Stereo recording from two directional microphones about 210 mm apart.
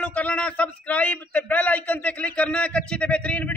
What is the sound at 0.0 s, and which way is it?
Speech, 5° left (ahead or behind).